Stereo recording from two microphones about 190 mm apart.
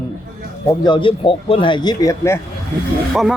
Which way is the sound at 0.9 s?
25° left (ahead or behind).